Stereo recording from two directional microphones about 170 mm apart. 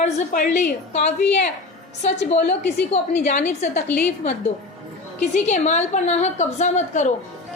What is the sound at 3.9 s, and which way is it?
Speech, 10° left (ahead or behind).